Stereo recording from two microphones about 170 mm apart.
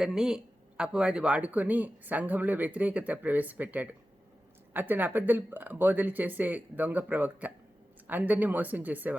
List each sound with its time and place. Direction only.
0.0 s speech: 5° right (ahead or behind)